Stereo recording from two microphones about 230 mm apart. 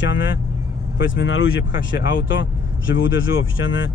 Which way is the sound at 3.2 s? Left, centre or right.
Left.